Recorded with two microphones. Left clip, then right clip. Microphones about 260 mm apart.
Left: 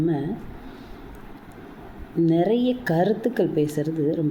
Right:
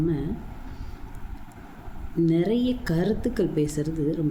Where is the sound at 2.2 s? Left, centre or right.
Centre.